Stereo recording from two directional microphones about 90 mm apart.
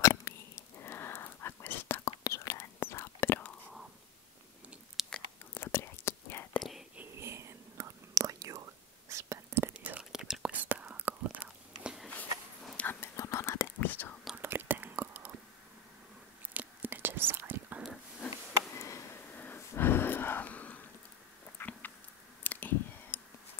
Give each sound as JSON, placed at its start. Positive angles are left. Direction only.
{"t": 0.0, "sound": "sneeze", "side_deg": 35}
{"t": 2.0, "sound": "whispering", "side_deg": 35}
{"t": 5.0, "sound": "biting", "side_deg": -5}
{"t": 5.5, "sound": "whispering", "side_deg": 30}
{"t": 7.0, "sound": "whispering", "side_deg": -30}
{"t": 9.8, "sound": "whispering", "side_deg": -15}
{"t": 10.7, "sound": "whispering", "side_deg": -20}
{"t": 12.7, "sound": "a sound", "side_deg": 20}
{"t": 13.1, "sound": "whispering", "side_deg": 35}
{"t": 13.7, "sound": "whispering", "side_deg": 20}
{"t": 14.3, "sound": "whispering", "side_deg": -25}
{"t": 16.5, "sound": "whispering", "side_deg": -20}
{"t": 18.7, "sound": "a sound", "side_deg": 35}
{"t": 19.3, "sound": "a sound", "side_deg": 20}